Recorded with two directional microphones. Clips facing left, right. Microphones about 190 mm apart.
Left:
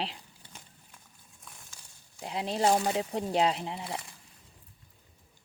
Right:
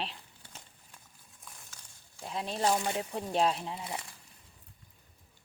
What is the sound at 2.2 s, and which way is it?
Speech, 20° left (ahead or behind).